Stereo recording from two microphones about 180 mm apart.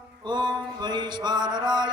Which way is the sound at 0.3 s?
25° right (ahead or behind).